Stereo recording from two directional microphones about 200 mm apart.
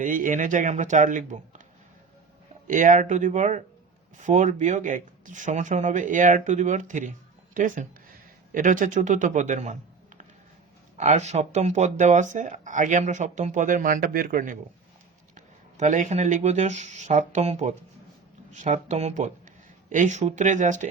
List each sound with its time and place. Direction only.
0.0 s speech: 40° right (ahead or behind)
2.6 s speech: 40° right (ahead or behind)